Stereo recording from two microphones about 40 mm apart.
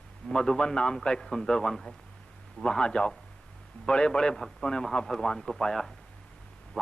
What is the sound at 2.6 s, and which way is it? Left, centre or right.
A man's voice, left.